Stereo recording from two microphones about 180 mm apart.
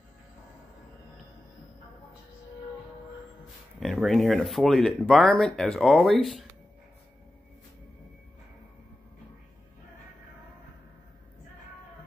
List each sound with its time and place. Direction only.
3.8 s speech: centre (ahead or behind)